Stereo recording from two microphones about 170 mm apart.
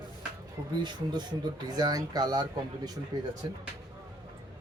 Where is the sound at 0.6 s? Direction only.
15° right (ahead or behind).